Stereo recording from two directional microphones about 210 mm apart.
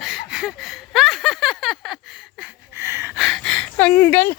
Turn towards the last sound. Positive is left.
turn(degrees=10)  # may be behind; listen again after turning